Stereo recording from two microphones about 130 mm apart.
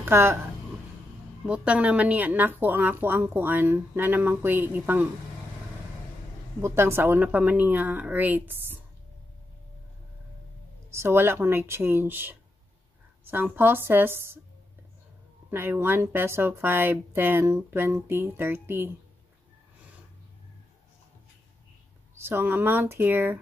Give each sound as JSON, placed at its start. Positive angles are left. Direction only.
{"t": 0.0, "sound": "speech", "side_deg": -20}
{"t": 1.4, "sound": "a woman's voice", "side_deg": -10}
{"t": 6.6, "sound": "a woman's voice", "side_deg": -20}
{"t": 10.9, "sound": "a woman's voice", "side_deg": -20}
{"t": 15.5, "sound": "a woman's voice", "side_deg": -15}
{"t": 22.1, "sound": "a woman's voice", "side_deg": -20}